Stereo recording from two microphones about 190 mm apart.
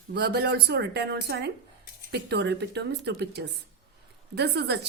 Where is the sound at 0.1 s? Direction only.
55° right (ahead or behind).